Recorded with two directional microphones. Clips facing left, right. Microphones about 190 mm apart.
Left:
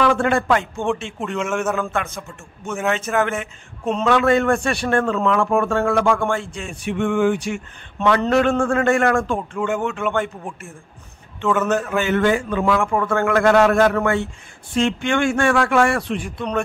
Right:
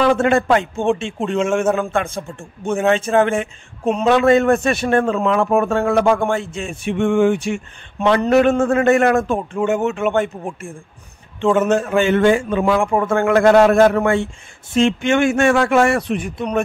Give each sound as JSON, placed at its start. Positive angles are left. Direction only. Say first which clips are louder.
{"t": 0.0, "sound": "speech", "louder": "right 3 dB", "side_deg": -25}